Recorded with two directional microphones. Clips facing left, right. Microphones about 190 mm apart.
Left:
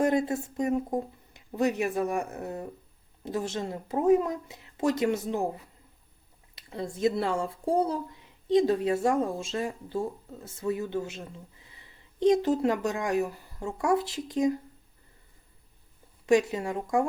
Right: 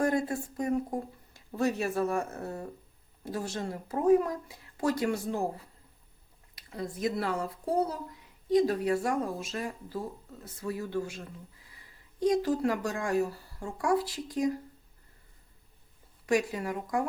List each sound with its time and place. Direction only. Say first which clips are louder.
0.0 s speech: left 3 dB; 20° left (ahead or behind)
6.6 s speech: left 5 dB; 25° left (ahead or behind)
16.2 s speech: left 5 dB; 25° left (ahead or behind)